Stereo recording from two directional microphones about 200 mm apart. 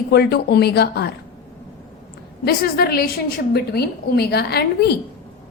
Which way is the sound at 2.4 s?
50° left (ahead or behind).